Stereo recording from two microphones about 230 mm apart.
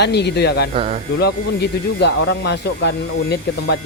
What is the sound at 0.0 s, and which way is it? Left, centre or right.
Speech, left.